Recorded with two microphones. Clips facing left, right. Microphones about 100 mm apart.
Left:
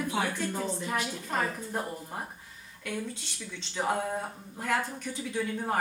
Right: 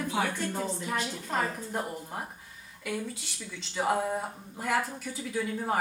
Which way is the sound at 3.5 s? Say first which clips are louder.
Right 2 dB; 5° right (ahead or behind).